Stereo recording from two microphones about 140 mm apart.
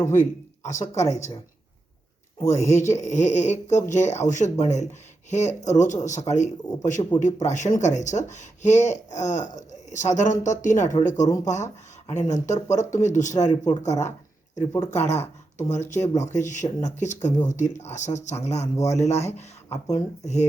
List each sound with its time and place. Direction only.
0.0 s speech: 20° left (ahead or behind)
1.0 s speech: 55° left (ahead or behind)
2.4 s speech: 20° left (ahead or behind)
2.9 s speech: 60° left (ahead or behind)
14.5 s speech: 25° left (ahead or behind)
14.8 s speech: 50° left (ahead or behind)